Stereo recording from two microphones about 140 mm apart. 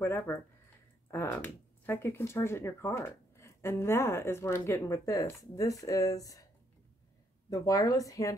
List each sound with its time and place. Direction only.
0.0 s speech: 15° left (ahead or behind)
7.4 s speech: 25° left (ahead or behind)